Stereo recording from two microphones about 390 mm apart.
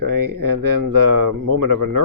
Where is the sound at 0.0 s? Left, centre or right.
Right.